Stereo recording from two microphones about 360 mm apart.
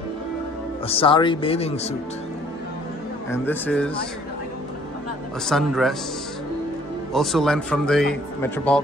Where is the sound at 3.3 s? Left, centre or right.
Centre.